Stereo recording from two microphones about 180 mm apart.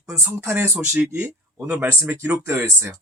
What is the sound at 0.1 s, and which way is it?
Speech, 10° right (ahead or behind).